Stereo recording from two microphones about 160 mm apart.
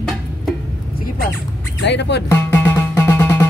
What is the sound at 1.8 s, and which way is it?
Music, 90° left.